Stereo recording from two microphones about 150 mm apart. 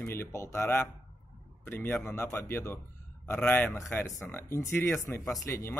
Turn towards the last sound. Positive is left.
turn(degrees=20)  # may be behind; listen again after turning